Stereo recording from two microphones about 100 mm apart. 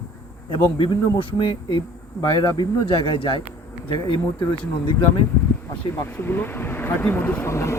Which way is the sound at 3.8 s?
50° left (ahead or behind).